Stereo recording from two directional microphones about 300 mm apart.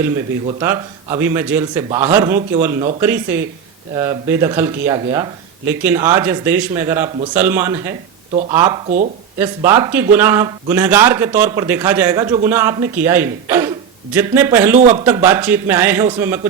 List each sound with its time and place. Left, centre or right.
0.4 s speech: centre
14.8 s speech: right
15.0 s speech: centre